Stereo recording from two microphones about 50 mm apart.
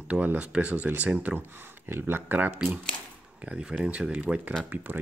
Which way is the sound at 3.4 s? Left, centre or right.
Right.